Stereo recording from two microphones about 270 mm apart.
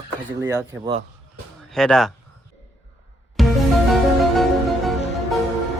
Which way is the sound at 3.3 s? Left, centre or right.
Centre.